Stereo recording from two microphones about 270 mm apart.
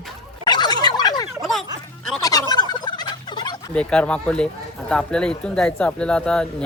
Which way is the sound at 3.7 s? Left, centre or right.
Centre.